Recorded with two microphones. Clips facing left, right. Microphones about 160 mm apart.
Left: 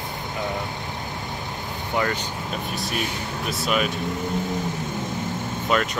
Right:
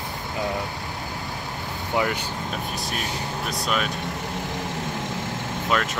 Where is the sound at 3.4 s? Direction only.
5° left (ahead or behind).